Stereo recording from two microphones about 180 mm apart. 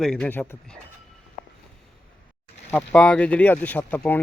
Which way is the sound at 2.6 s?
5° left (ahead or behind).